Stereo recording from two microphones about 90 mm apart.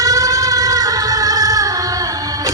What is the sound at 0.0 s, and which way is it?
Music, 40° right (ahead or behind).